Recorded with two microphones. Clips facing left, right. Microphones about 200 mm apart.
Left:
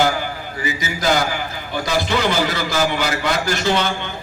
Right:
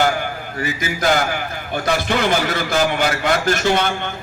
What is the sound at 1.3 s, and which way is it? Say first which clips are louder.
A man's voice: right 1 dB; 55° right (ahead or behind).